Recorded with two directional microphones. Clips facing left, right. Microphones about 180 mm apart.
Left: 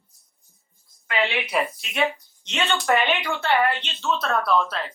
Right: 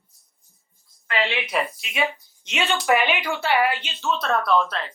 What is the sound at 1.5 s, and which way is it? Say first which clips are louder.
A woman's voice: left 1 dB; centre (ahead or behind).